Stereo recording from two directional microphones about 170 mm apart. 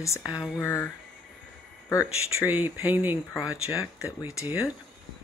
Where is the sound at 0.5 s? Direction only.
10° left (ahead or behind).